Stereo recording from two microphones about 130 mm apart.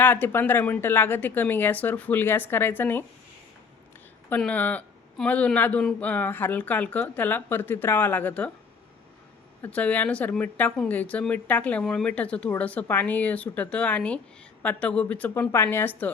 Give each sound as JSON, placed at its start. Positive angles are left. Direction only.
{"t": 0.0, "sound": "speech", "side_deg": 15}
{"t": 4.4, "sound": "speech", "side_deg": 10}
{"t": 9.6, "sound": "speech", "side_deg": 10}